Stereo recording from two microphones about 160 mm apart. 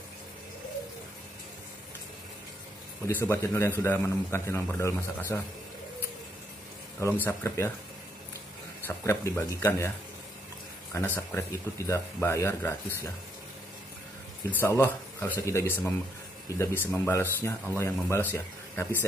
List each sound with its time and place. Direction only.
3.1 s a man's voice: 15° left (ahead or behind)
7.0 s a man's voice: 15° left (ahead or behind)
8.8 s a man's voice: 15° left (ahead or behind)
11.1 s a man's voice: 20° left (ahead or behind)
14.5 s a man's voice: 15° left (ahead or behind)